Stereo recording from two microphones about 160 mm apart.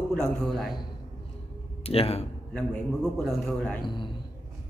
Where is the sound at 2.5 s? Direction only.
5° left (ahead or behind).